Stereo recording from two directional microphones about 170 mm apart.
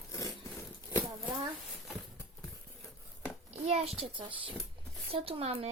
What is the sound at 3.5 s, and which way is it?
A child's voice, 40° right (ahead or behind).